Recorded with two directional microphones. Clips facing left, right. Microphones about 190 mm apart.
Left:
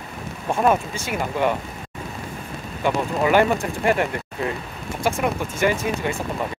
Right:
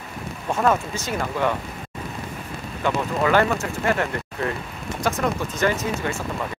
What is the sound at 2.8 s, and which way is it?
Speech, 15° left (ahead or behind).